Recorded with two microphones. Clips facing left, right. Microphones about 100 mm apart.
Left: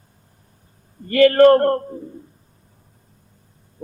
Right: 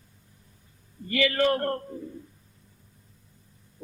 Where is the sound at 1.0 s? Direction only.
50° left (ahead or behind).